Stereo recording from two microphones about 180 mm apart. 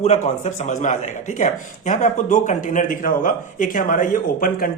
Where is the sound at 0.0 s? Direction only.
40° left (ahead or behind).